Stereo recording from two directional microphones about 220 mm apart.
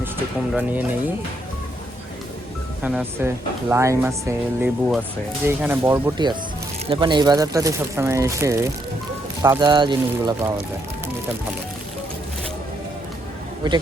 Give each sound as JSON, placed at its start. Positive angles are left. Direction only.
{"t": 0.5, "sound": "speech", "side_deg": -5}
{"t": 2.8, "sound": "speech", "side_deg": -10}